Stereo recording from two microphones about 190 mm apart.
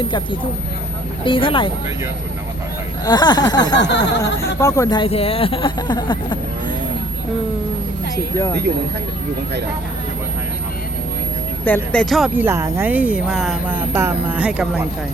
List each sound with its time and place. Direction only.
1.2 s speech: 25° left (ahead or behind)
3.0 s speech: 20° left (ahead or behind)
3.8 s a sound: 65° left (ahead or behind)
4.2 s speech: 15° left (ahead or behind)
11.6 s speech: 10° left (ahead or behind)
12.4 s speech: 15° right (ahead or behind)